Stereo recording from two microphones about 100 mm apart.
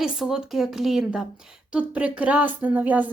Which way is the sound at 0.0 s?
5° right (ahead or behind).